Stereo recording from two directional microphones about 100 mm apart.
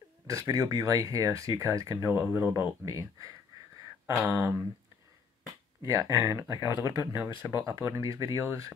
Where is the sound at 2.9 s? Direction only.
35° right (ahead or behind).